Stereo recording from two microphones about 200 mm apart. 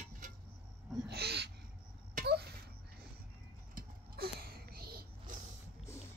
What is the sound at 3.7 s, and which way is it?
Zipper, 50° right (ahead or behind).